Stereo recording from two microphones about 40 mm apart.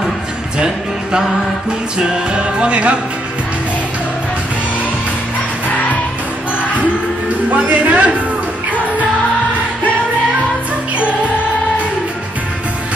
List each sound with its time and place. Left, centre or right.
2.0 s music: right
7.5 s speech: right